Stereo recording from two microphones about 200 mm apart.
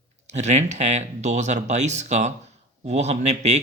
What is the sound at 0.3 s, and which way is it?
Speech, 35° right (ahead or behind).